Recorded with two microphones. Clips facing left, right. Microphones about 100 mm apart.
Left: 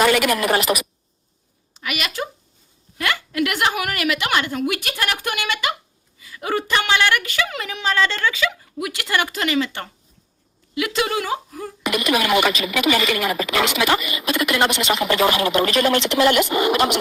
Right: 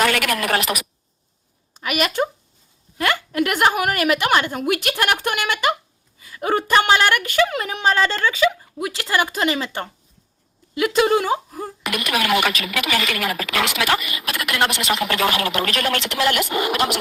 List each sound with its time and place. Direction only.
0.0 s speech: 5° left (ahead or behind)
1.7 s a woman's voice: 45° right (ahead or behind)
11.8 s speech: centre (ahead or behind)